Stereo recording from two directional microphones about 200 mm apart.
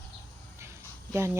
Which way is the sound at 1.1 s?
10° right (ahead or behind).